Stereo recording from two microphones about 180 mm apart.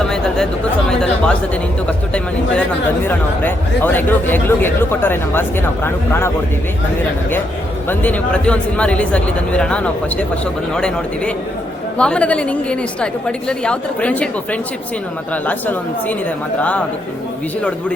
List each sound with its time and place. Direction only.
0.0 s chatter: 5° left (ahead or behind)
0.9 s a woman's voice: 5° left (ahead or behind)
7.9 s a woman's voice: 10° left (ahead or behind)